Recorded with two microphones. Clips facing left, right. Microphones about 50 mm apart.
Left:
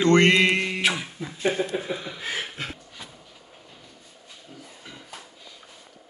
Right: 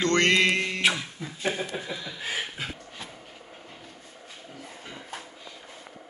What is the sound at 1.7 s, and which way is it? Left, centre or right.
Speech, left.